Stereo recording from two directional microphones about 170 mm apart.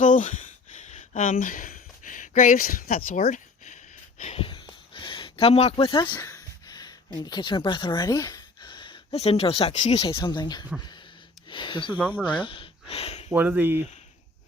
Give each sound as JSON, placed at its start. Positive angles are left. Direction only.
{"t": 0.0, "sound": "a sound", "side_deg": 45}
{"t": 4.2, "sound": "speech", "side_deg": 35}
{"t": 13.2, "sound": "speech", "side_deg": -10}